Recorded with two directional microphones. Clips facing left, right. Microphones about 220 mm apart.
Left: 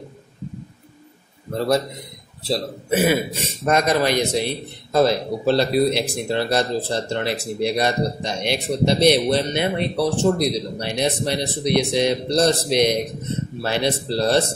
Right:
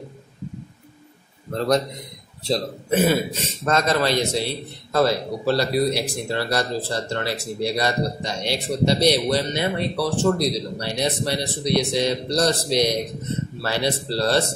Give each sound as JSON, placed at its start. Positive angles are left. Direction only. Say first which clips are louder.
{"t": 1.5, "sound": "a man's voice", "louder": "left 1 dB", "side_deg": 10}